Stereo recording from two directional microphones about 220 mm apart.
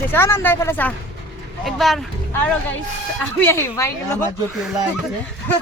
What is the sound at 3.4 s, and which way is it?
Speech, 10° left (ahead or behind).